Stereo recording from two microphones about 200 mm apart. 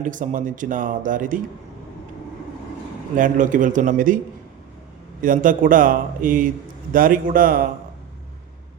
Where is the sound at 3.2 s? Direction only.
40° right (ahead or behind).